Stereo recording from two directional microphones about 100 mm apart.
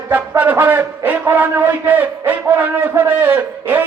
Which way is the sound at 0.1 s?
20° right (ahead or behind).